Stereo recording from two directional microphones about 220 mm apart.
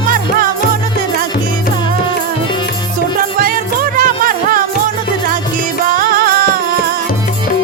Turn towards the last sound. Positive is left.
turn(degrees=-40)  # may be behind; listen again after turning